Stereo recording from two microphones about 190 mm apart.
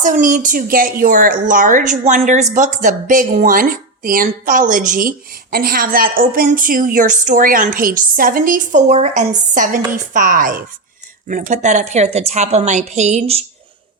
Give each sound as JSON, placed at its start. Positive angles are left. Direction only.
{"t": 0.0, "sound": "a woman's voice", "side_deg": -45}